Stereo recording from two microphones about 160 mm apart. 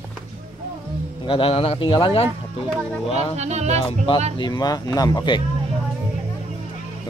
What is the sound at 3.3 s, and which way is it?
Speech, 45° right (ahead or behind).